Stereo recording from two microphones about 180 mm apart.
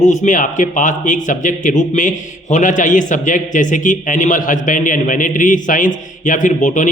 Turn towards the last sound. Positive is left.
turn(degrees=45)  # may be behind; listen again after turning